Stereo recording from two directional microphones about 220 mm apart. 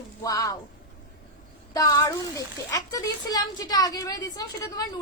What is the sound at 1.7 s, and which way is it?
Speech, 15° left (ahead or behind).